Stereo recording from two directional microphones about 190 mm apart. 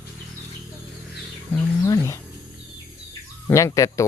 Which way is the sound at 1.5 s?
15° left (ahead or behind).